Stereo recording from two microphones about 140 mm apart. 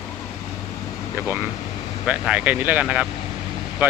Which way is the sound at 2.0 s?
10° right (ahead or behind).